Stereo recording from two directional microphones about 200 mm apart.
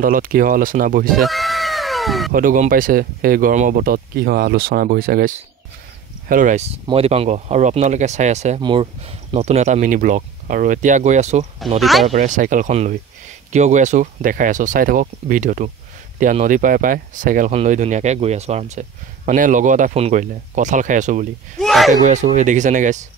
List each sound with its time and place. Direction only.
0.0 s speech: 45° right (ahead or behind)
1.2 s cat: centre (ahead or behind)
2.3 s speech: 40° right (ahead or behind)
8.5 s speech: 25° right (ahead or behind)
11.8 s speech: centre (ahead or behind)
12.1 s speech: 40° right (ahead or behind)
21.5 s speech: centre (ahead or behind)
22.0 s speech: 35° right (ahead or behind)